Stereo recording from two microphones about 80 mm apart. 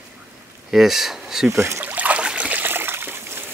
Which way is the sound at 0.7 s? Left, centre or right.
Centre.